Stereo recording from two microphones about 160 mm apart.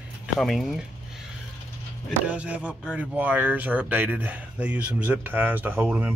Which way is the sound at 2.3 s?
10° right (ahead or behind).